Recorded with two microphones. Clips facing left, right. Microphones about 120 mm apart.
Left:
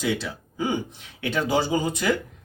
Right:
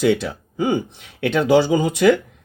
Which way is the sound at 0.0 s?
65° right (ahead or behind).